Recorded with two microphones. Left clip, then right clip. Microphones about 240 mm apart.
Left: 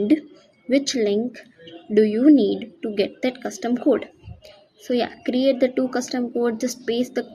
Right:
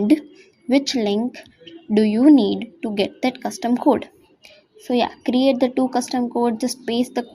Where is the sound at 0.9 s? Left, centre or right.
Right.